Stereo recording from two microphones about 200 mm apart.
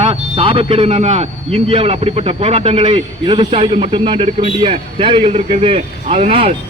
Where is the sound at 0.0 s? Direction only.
25° right (ahead or behind).